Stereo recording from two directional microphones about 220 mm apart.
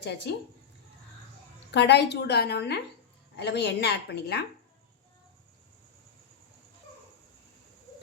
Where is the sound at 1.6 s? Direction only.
50° left (ahead or behind).